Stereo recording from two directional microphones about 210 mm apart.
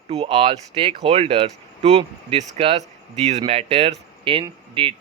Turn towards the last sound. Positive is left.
turn(degrees=-25)  # may be behind; listen again after turning